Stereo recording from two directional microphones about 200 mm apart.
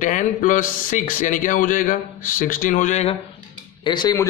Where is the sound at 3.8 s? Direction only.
20° left (ahead or behind).